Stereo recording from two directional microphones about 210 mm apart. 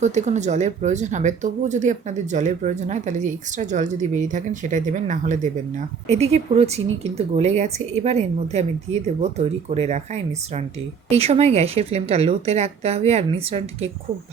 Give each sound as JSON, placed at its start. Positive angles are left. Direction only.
{"t": 0.0, "sound": "a woman's voice", "side_deg": -35}